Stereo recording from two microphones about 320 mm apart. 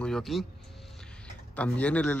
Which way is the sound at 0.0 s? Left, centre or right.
Centre.